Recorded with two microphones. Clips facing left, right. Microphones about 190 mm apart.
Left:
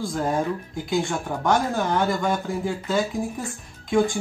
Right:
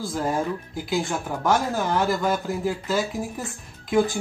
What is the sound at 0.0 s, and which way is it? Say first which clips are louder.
Speech: left 1 dB; 5° right (ahead or behind).